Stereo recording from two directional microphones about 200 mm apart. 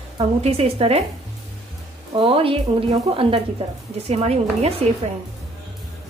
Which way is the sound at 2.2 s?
25° right (ahead or behind).